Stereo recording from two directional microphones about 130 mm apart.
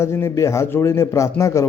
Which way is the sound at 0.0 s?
20° left (ahead or behind).